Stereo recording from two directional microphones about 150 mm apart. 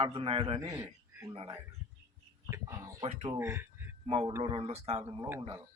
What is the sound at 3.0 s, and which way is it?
Speech, 45° right (ahead or behind).